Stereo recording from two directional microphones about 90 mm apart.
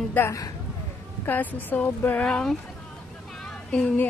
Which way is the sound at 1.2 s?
20° left (ahead or behind).